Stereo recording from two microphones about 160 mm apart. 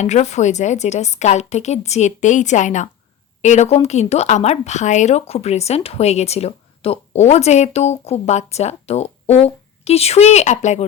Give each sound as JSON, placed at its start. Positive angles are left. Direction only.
{"t": 0.0, "sound": "speech", "side_deg": 45}